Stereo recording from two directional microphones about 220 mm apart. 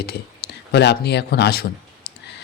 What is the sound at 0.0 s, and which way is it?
Speech, 45° left (ahead or behind).